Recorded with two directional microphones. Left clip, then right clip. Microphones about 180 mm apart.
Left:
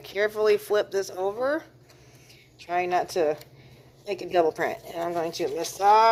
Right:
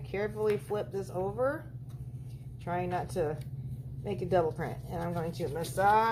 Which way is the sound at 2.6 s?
65° left (ahead or behind).